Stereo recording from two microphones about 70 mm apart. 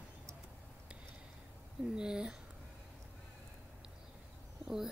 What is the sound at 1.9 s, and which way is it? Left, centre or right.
Speech, centre.